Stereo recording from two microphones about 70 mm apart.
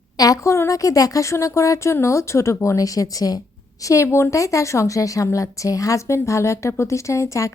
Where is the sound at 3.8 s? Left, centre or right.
Left.